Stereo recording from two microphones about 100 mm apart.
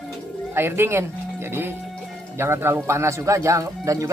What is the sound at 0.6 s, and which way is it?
Speech, 25° right (ahead or behind).